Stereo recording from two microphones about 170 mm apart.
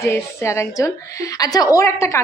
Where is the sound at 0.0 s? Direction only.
15° left (ahead or behind).